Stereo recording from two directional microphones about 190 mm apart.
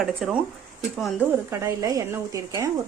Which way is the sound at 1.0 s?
10° right (ahead or behind).